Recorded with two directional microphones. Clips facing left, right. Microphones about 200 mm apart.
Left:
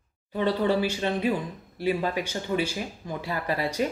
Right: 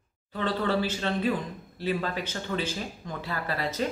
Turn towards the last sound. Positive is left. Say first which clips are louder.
# left 3 dB
turn(degrees=15)  # may be behind; listen again after turning